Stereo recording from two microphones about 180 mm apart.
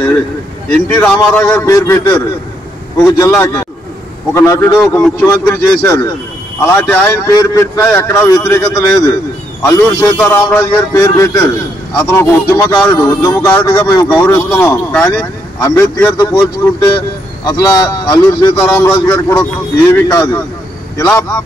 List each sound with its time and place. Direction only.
0.7 s speech: 5° left (ahead or behind)
1.7 s a man's voice: 15° left (ahead or behind)